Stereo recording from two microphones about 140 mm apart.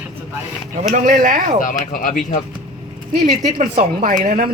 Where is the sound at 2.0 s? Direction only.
75° left (ahead or behind).